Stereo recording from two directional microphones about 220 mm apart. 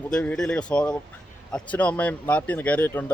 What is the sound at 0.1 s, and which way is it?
Speech, 5° left (ahead or behind).